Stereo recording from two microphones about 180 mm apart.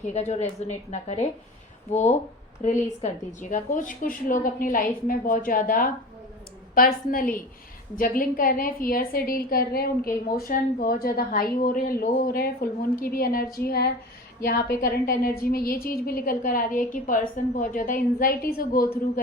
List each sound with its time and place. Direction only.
0.0 s a woman's voice: 40° left (ahead or behind); by 18.9 s 55° left (ahead or behind)